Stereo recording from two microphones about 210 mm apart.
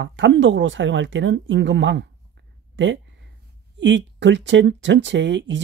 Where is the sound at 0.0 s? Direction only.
60° right (ahead or behind).